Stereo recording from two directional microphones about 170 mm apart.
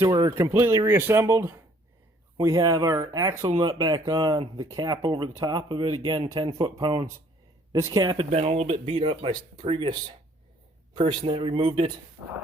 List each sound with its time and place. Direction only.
0.0 s speech: 25° right (ahead or behind)
8.3 s speech: 35° right (ahead or behind)
10.9 s speech: 35° right (ahead or behind)